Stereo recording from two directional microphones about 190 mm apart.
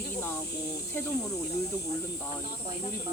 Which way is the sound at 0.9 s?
15° left (ahead or behind).